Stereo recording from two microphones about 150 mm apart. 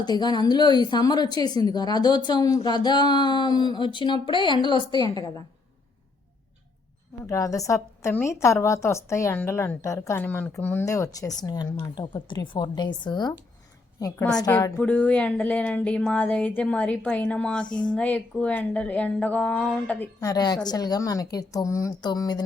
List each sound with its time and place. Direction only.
0.0 s a woman's voice: 30° left (ahead or behind)
7.3 s a woman's voice: 20° left (ahead or behind)
14.5 s speech: 10° left (ahead or behind)
20.2 s a woman's voice: 25° left (ahead or behind)